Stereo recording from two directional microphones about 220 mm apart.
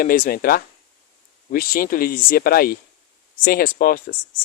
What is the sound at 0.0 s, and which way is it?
Speech, 40° left (ahead or behind).